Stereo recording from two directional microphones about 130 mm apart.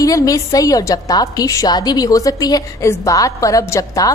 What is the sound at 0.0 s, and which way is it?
A woman's voice, 25° left (ahead or behind).